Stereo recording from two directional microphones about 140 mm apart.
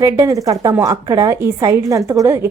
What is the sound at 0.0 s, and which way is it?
A woman's voice, 25° right (ahead or behind).